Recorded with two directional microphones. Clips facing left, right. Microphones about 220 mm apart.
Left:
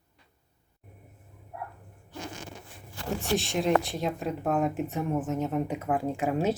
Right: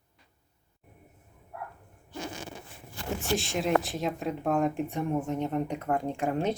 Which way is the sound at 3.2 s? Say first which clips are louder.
Left 2 dB; centre (ahead or behind).